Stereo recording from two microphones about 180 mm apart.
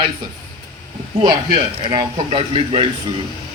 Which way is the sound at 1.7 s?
25° right (ahead or behind).